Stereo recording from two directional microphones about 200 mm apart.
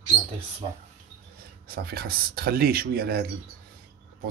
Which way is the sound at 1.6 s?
50° right (ahead or behind).